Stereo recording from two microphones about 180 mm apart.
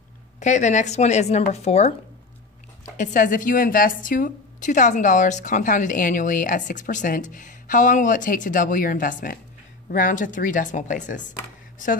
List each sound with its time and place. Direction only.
0.4 s speech: 40° left (ahead or behind)
3.0 s a woman's voice: 45° left (ahead or behind)